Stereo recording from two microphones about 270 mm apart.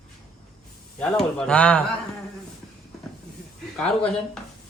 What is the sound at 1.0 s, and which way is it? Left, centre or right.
Speech, centre.